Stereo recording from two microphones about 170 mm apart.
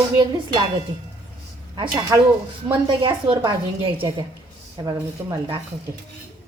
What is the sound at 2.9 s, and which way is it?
A woman's voice, 30° right (ahead or behind).